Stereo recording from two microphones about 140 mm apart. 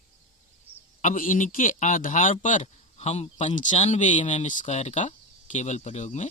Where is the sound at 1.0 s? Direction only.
70° left (ahead or behind).